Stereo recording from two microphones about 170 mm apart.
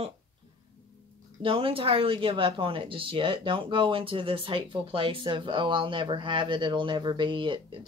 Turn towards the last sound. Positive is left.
turn(degrees=-30)  # may be behind; listen again after turning